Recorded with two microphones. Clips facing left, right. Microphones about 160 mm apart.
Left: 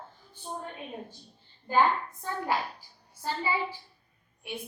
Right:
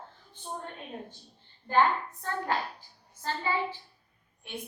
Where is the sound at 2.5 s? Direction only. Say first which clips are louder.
Left 1 dB; 10° left (ahead or behind).